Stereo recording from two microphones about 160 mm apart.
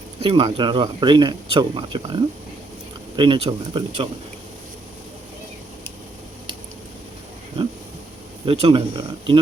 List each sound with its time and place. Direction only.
0.2 s speech: 35° right (ahead or behind)
8.4 s speech: 35° right (ahead or behind)